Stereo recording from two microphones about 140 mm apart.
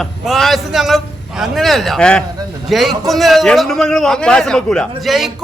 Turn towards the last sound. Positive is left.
turn(degrees=0)  # may be behind; listen again after turning